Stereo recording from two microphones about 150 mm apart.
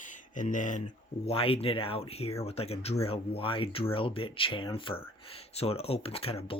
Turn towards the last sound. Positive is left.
turn(degrees=40)  # may be behind; listen again after turning